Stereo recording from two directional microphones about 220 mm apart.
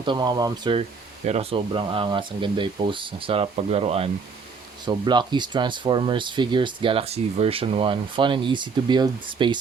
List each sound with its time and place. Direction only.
0.0 s speech: 20° right (ahead or behind)